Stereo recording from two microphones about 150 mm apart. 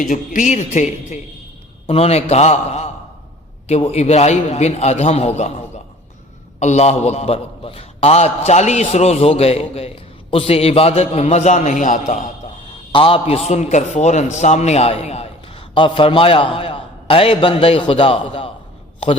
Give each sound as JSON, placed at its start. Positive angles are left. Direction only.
{"t": 0.1, "sound": "a man's voice", "side_deg": 55}
{"t": 6.6, "sound": "a man's voice", "side_deg": 50}
{"t": 12.9, "sound": "a man's voice", "side_deg": 35}